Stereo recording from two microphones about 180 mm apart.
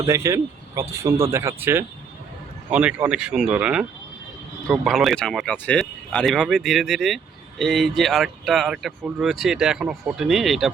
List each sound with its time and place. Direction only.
0.0 s speech: 15° right (ahead or behind); by 10.7 s centre (ahead or behind)